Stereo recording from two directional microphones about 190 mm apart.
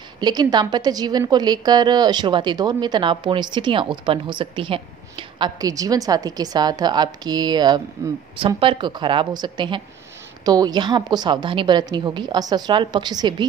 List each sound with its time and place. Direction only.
0.2 s a woman's voice: 20° right (ahead or behind)